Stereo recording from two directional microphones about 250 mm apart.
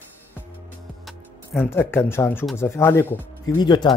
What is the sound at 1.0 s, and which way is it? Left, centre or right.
Speech, centre.